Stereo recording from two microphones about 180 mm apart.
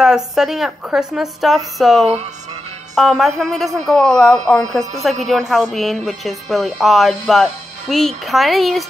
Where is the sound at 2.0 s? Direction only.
40° right (ahead or behind).